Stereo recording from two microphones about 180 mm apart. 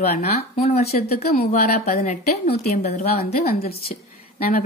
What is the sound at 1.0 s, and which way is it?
Speech, 60° left (ahead or behind).